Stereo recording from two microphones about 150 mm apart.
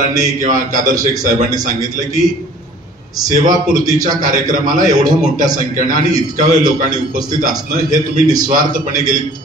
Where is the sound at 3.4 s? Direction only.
60° right (ahead or behind).